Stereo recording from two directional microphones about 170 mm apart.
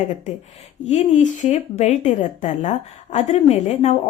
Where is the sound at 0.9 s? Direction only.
45° left (ahead or behind).